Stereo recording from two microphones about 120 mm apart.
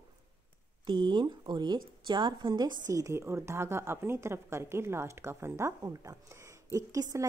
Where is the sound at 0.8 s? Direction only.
40° right (ahead or behind).